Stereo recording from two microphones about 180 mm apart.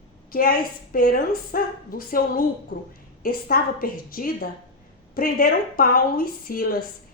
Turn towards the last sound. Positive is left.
turn(degrees=55)  # may be behind; listen again after turning